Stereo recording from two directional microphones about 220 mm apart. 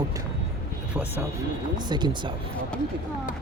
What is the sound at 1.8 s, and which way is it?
Speech, 20° right (ahead or behind).